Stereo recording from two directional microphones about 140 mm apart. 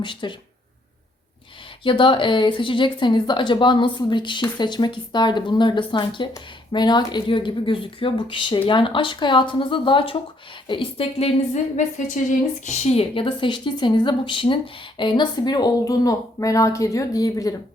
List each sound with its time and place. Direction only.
0.0 s a woman's voice: 35° left (ahead or behind)
1.8 s a woman's voice: 35° left (ahead or behind)
12.6 s a woman's voice: 55° left (ahead or behind); by 17.5 s 25° left (ahead or behind)